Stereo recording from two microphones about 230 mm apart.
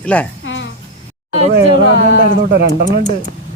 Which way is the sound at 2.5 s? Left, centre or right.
Right.